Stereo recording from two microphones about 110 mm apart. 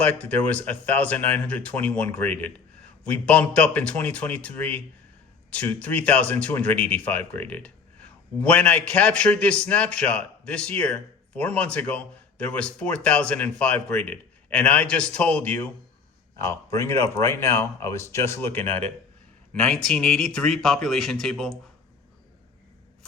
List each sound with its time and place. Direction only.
0.0 s a man's voice: 15° left (ahead or behind)
16.4 s speech: 25° left (ahead or behind)
19.5 s speech: 5° left (ahead or behind)